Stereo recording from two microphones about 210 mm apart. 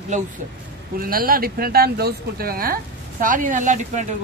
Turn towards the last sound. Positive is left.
turn(degrees=-35)  # may be behind; listen again after turning